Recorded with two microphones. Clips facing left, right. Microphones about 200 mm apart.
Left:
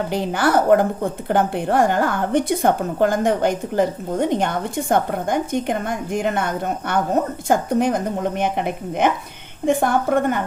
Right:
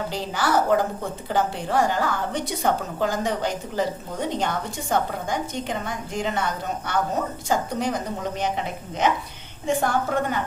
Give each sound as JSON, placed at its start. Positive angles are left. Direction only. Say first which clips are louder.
{"t": 0.1, "sound": "a woman's voice", "louder": "left 5 dB", "side_deg": 55}